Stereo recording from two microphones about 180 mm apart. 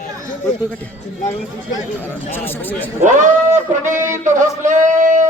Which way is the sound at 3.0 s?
45° right (ahead or behind).